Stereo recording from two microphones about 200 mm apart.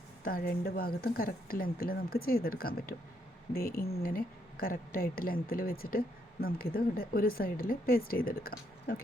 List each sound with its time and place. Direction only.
0.3 s speech: 45° left (ahead or behind)